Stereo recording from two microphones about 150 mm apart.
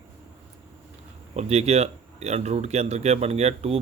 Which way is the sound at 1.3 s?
45° right (ahead or behind).